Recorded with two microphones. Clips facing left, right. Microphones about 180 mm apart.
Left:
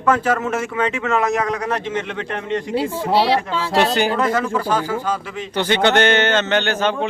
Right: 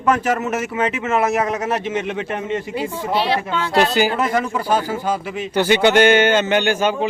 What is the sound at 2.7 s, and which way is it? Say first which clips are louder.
Speech: left 6 dB; 30° left (ahead or behind).